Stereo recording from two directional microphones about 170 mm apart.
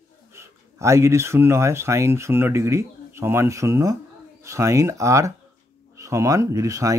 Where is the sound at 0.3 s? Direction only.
15° right (ahead or behind).